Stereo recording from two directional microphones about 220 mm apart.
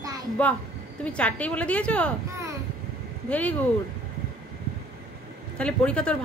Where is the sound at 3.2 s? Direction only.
5° left (ahead or behind).